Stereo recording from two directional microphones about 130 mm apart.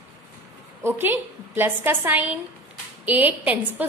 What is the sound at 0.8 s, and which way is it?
A woman's voice, 15° right (ahead or behind).